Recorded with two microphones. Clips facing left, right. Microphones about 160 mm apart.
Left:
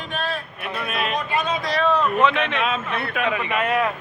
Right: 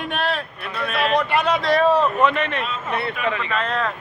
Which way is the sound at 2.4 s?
90° left.